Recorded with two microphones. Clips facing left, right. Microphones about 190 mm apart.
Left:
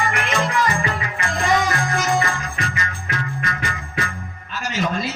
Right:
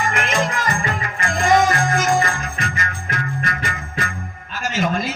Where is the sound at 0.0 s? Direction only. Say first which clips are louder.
Right 1 dB; 45° right (ahead or behind).